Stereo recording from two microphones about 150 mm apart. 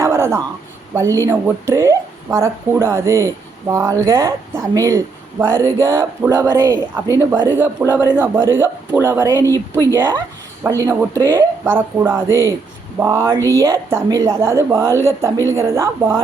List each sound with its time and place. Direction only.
0.0 s a sound: 15° right (ahead or behind)
0.9 s speech: 20° right (ahead or behind)
11.2 s speech: 30° right (ahead or behind)
11.6 s speech: 15° right (ahead or behind)